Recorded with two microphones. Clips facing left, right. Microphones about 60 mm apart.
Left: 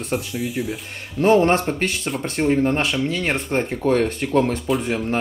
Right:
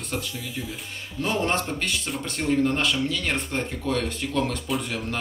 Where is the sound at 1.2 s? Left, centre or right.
Left.